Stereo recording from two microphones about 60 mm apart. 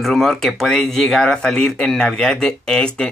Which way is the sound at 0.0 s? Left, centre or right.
Centre.